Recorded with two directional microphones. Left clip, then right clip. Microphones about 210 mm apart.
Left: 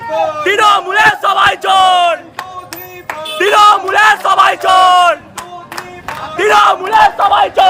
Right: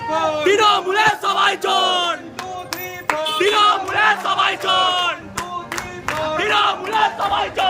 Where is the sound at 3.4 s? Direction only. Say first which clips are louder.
Left 9 dB; 20° left (ahead or behind).